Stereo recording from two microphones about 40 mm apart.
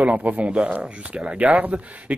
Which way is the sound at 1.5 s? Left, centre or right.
Right.